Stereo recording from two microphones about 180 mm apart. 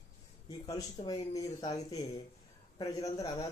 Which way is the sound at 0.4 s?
20° left (ahead or behind).